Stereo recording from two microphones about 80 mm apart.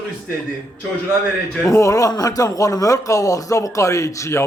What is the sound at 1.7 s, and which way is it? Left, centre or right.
Speech, left.